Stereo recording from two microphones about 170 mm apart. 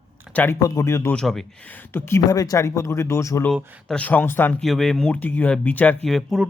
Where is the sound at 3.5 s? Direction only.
5° left (ahead or behind).